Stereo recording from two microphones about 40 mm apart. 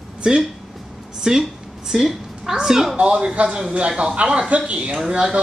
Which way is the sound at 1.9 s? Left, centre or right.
Centre.